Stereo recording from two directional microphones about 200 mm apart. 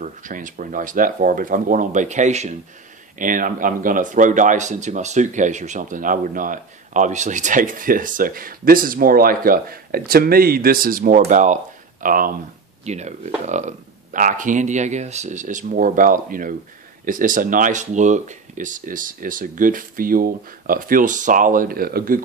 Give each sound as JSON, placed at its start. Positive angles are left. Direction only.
{"t": 0.0, "sound": "speech", "side_deg": -40}